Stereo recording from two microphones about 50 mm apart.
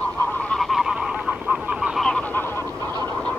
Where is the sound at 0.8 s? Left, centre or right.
Centre.